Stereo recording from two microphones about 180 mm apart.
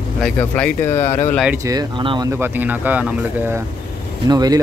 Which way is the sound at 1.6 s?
20° right (ahead or behind).